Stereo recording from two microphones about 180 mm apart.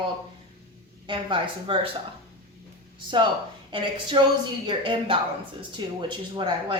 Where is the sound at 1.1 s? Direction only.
25° right (ahead or behind).